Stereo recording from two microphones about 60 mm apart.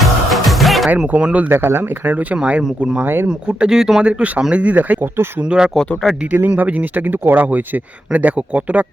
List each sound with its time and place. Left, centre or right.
0.0 s music: centre
1.1 s speech: right
1.5 s speech: right
2.1 s speech: right
3.0 s speech: right
3.2 s speech: centre
4.0 s speech: centre
5.4 s speech: centre
6.6 s speech: right